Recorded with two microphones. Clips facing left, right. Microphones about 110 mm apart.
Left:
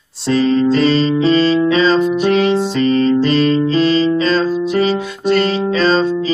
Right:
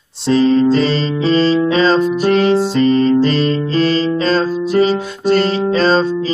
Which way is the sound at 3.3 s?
Centre (ahead or behind).